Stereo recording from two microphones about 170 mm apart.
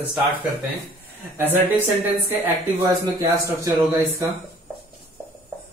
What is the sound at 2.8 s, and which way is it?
Speech, 20° right (ahead or behind).